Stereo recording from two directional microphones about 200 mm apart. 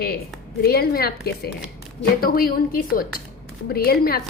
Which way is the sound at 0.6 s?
50° left (ahead or behind).